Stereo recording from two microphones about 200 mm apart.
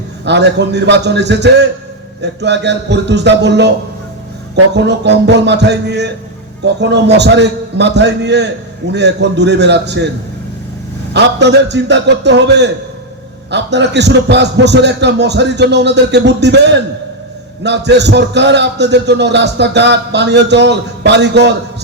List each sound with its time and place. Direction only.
0.3 s a man's voice: 60° right (ahead or behind)
11.1 s a man's voice: 60° right (ahead or behind)